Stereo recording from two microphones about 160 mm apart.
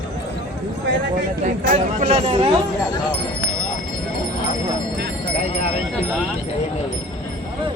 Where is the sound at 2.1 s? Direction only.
40° right (ahead or behind).